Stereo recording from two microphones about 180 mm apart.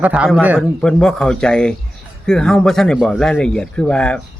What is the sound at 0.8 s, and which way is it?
A man's voice, 5° left (ahead or behind).